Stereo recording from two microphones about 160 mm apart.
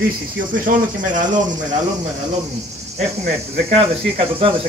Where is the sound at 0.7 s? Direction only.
60° right (ahead or behind).